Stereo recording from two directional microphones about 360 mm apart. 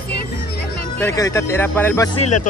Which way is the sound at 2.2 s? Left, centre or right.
Left.